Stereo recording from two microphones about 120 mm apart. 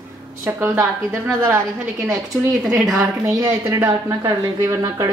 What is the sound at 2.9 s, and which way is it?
A woman's voice, 25° right (ahead or behind).